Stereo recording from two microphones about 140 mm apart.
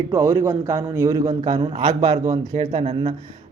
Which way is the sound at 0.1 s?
20° right (ahead or behind).